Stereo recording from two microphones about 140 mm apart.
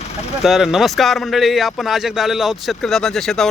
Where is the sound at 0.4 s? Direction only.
Centre (ahead or behind).